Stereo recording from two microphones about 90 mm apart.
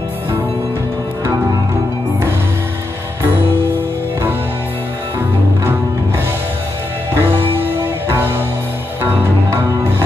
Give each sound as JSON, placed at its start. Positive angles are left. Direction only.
{"t": 7.2, "sound": "music", "side_deg": -25}
{"t": 9.6, "sound": "music", "side_deg": -25}